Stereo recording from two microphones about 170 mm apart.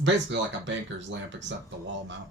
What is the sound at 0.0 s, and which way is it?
Speech, 90° right.